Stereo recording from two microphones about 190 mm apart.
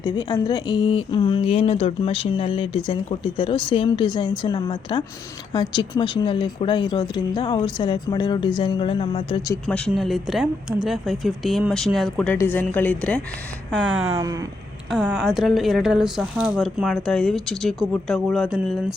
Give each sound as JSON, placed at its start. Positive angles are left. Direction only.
{"t": 0.0, "sound": "speech", "side_deg": 20}
{"t": 9.6, "sound": "speech", "side_deg": 5}
{"t": 14.8, "sound": "speech", "side_deg": -5}